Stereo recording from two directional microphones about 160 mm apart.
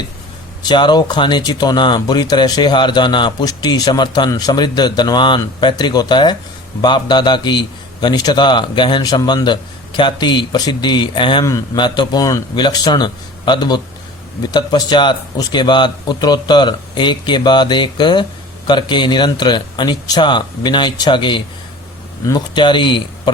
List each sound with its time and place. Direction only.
0.7 s speech: 30° left (ahead or behind)